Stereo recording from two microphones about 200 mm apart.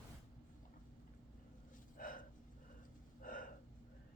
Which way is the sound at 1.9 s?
45° left (ahead or behind).